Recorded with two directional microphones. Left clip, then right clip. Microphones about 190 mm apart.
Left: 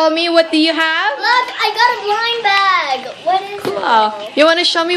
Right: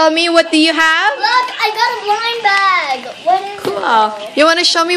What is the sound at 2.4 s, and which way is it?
Speech, 5° right (ahead or behind).